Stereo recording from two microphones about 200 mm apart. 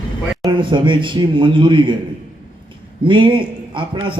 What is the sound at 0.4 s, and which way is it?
A man's voice, 25° right (ahead or behind).